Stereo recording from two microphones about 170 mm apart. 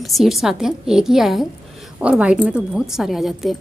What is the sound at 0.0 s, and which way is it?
A woman's voice, centre (ahead or behind).